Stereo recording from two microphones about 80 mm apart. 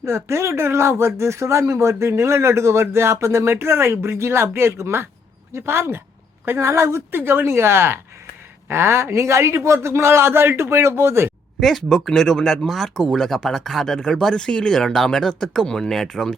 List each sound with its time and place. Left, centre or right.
0.0 s speech: right
11.6 s speech: centre